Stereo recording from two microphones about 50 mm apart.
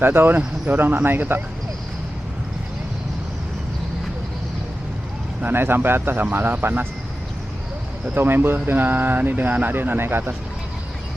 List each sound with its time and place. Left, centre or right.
0.0 s speech: right
5.4 s speech: right
8.1 s speech: right